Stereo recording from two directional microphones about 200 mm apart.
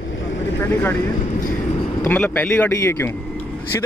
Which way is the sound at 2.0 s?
10° left (ahead or behind).